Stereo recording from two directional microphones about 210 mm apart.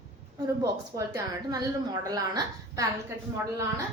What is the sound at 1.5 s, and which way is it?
A woman's voice, 15° right (ahead or behind).